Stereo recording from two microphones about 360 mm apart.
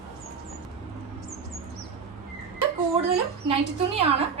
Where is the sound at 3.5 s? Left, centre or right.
Centre.